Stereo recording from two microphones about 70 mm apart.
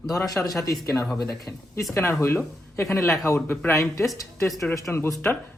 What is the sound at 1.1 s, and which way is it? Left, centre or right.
Speech, left.